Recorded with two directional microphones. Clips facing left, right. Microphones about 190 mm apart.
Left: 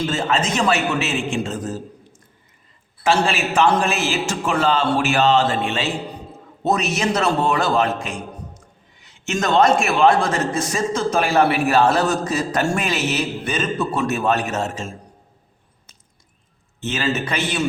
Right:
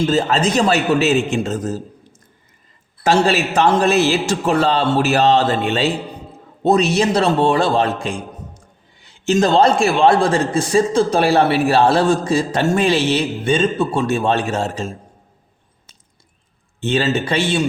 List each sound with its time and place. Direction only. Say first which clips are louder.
0.0 s a man's voice: right 5 dB; 35° right (ahead or behind)
3.0 s a man's voice: right 4 dB; 40° right (ahead or behind)
16.8 s a man's voice: right 5 dB; 30° right (ahead or behind)